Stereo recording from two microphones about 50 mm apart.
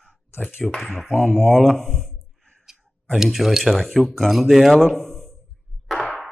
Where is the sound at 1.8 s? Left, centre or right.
Right.